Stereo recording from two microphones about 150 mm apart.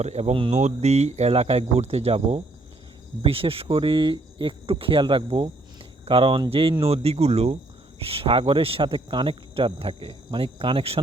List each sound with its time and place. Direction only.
0.0 s speech: 45° right (ahead or behind)